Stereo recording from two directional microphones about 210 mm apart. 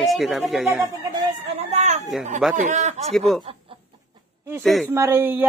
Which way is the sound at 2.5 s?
35° right (ahead or behind).